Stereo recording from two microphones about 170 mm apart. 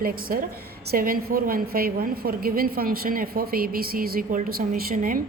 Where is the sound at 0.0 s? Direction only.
55° right (ahead or behind).